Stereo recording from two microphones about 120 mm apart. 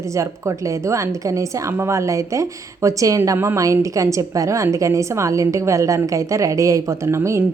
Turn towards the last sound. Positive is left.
turn(degrees=-25)  # may be behind; listen again after turning